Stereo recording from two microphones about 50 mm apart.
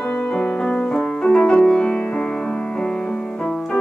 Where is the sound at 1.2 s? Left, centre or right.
Left.